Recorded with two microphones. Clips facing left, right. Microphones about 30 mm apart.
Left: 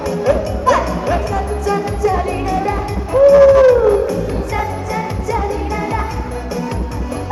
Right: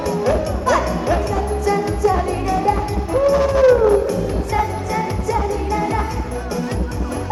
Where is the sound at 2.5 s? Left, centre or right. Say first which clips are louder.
Even; centre.